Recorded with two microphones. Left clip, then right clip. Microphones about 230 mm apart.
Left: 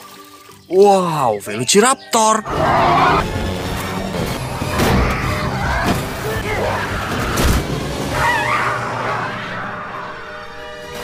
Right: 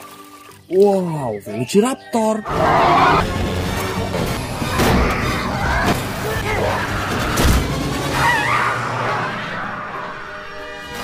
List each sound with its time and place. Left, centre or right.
0.7 s speech: centre
1.8 s speech: left
2.4 s music: centre
8.2 s a sound: centre